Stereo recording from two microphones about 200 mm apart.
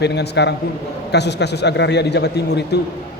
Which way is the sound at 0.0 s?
55° left (ahead or behind).